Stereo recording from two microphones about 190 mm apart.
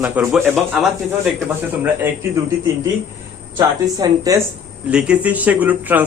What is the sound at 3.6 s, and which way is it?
A man's voice, 15° right (ahead or behind).